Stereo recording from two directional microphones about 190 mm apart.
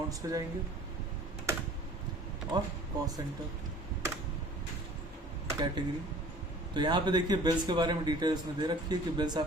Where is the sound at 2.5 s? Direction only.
20° right (ahead or behind).